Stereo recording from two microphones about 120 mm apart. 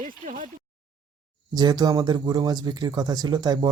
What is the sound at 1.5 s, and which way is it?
Speech, 35° right (ahead or behind).